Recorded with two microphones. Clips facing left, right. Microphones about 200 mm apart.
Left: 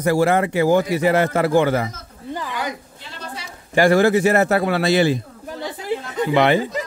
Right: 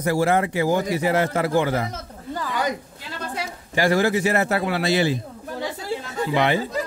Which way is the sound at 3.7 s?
55° left (ahead or behind).